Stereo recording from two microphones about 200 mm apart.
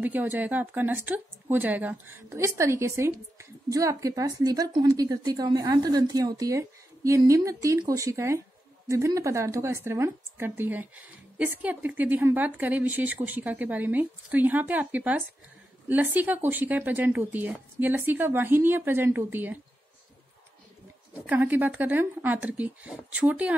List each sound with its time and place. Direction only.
0.0 s a woman's voice: 10° right (ahead or behind)
21.3 s a woman's voice: 10° right (ahead or behind)